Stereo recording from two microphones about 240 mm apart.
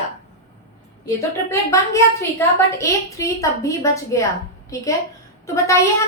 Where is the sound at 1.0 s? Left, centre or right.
Centre.